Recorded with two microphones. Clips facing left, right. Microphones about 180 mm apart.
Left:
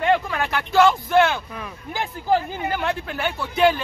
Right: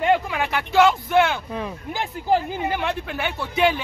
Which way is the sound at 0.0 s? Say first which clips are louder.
Even; 10° right (ahead or behind).